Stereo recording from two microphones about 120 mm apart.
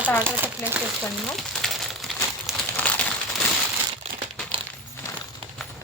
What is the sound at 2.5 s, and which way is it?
Crumpling, 5° right (ahead or behind).